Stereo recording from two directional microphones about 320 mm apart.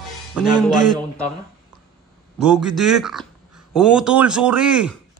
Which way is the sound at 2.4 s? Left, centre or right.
Centre.